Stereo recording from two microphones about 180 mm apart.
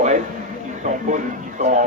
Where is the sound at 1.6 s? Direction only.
45° right (ahead or behind).